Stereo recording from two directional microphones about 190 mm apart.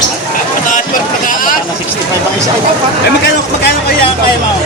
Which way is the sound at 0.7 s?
45° left (ahead or behind).